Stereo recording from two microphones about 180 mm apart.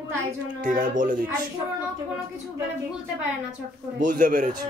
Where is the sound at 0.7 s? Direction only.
45° right (ahead or behind).